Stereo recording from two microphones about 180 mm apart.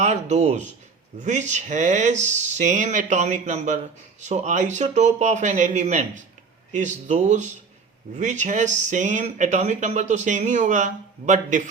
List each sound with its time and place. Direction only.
0.0 s speech: 40° right (ahead or behind)